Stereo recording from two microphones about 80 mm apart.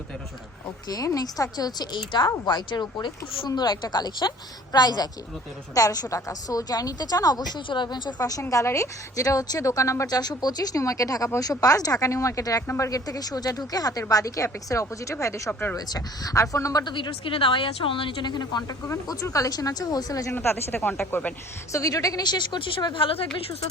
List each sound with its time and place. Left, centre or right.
0.9 s a woman's voice: left
8.2 s a woman's voice: left
10.1 s a woman's voice: left
13.1 s a woman's voice: left
15.7 s a woman's voice: left
16.8 s speech: left
18.7 s a woman's voice: left
20.3 s speech: left
21.7 s speech: left